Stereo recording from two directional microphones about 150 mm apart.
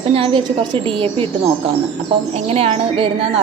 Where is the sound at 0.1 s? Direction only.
35° right (ahead or behind).